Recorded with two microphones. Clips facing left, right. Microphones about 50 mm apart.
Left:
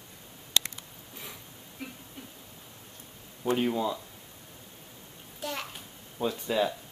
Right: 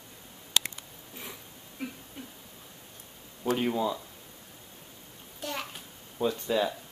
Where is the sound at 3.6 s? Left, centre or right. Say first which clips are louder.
Even; centre.